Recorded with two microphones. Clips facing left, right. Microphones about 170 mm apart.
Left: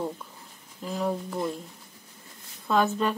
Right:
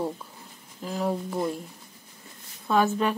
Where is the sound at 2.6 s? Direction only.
5° right (ahead or behind).